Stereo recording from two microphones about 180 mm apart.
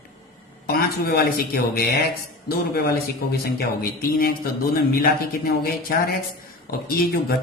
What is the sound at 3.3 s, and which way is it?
Speech, 60° left (ahead or behind).